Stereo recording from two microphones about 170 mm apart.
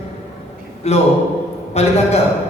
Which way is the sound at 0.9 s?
40° left (ahead or behind).